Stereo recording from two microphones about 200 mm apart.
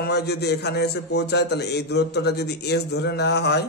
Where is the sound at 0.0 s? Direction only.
55° left (ahead or behind).